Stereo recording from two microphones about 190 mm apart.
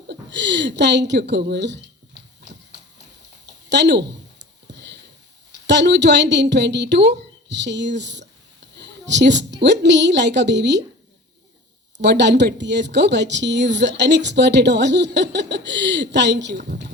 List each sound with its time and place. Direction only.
0.1 s a woman's voice: 65° right (ahead or behind)
3.7 s speech: 65° right (ahead or behind)
4.7 s sniff: 65° right (ahead or behind)
5.6 s a woman's voice: 65° right (ahead or behind)
12.0 s a woman's voice: 65° right (ahead or behind)